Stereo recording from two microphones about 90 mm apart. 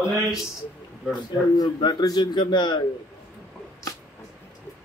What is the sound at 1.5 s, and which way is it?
A man's voice, 50° left (ahead or behind).